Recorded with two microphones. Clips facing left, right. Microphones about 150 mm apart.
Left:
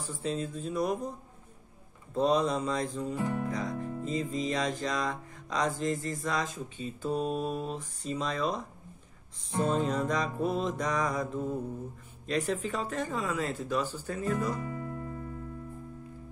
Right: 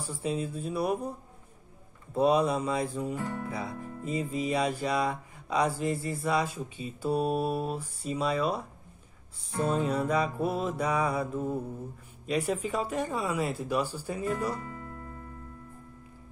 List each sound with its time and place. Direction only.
0.0 s a sound: 10° right (ahead or behind)
2.1 s music: 10° right (ahead or behind)
3.2 s music: 15° left (ahead or behind)
3.4 s music: 10° right (ahead or behind)
9.7 s music: 10° right (ahead or behind)
14.5 s guitar: 20° left (ahead or behind)